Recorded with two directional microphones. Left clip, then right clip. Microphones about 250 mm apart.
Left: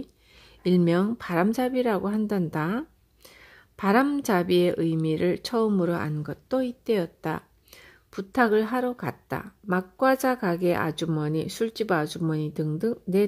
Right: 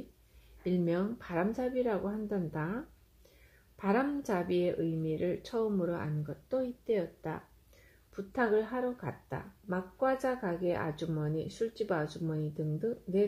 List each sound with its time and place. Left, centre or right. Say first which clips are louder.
0.7 s speech: left 9 dB; left